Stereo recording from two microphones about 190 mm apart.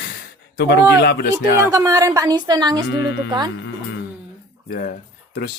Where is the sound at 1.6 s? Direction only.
15° right (ahead or behind).